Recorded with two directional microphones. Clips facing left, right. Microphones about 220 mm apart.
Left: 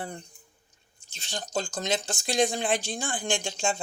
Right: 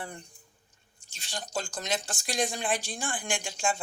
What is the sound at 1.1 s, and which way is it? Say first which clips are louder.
Speech: left 3 dB; 25° left (ahead or behind).